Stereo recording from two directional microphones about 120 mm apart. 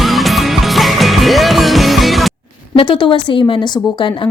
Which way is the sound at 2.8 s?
45° left (ahead or behind).